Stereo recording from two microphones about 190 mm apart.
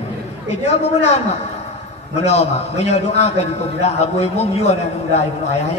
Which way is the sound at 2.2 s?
35° left (ahead or behind).